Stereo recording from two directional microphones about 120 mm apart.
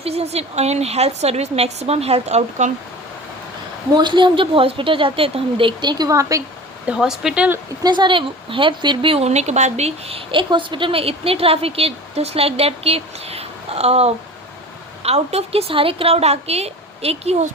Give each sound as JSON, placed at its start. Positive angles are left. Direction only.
{"t": 0.0, "sound": "speech", "side_deg": -60}
{"t": 3.9, "sound": "a woman's voice", "side_deg": -40}
{"t": 6.8, "sound": "speech", "side_deg": -5}
{"t": 7.8, "sound": "speech", "side_deg": -40}